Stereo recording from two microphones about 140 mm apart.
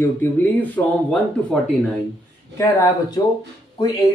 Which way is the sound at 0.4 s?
10° left (ahead or behind).